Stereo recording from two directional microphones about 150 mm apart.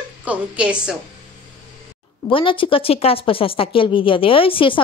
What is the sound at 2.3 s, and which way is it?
Speech, 35° left (ahead or behind).